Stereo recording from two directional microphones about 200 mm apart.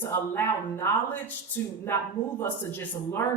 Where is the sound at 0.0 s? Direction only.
10° left (ahead or behind).